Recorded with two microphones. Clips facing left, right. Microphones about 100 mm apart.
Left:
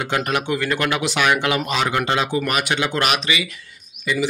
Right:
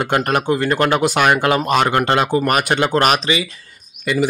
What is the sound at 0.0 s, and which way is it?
A man's voice, 50° right (ahead or behind).